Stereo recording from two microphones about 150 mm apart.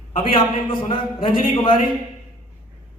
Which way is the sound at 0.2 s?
35° left (ahead or behind).